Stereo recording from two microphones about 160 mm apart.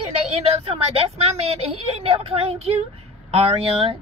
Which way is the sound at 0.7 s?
40° right (ahead or behind).